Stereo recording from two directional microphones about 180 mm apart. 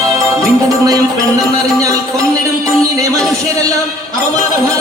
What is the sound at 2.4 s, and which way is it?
Speech, 20° right (ahead or behind).